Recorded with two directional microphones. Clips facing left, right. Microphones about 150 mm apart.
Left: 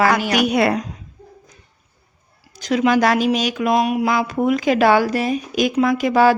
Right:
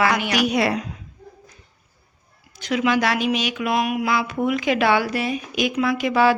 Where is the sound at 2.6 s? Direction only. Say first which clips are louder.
Left 4 dB; 40° left (ahead or behind).